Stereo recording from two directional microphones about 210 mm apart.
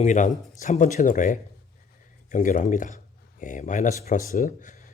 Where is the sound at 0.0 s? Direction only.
35° left (ahead or behind).